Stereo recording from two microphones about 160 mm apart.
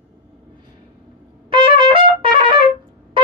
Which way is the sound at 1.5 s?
30° right (ahead or behind).